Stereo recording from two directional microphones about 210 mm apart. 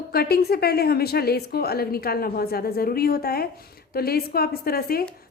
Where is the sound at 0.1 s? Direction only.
50° left (ahead or behind).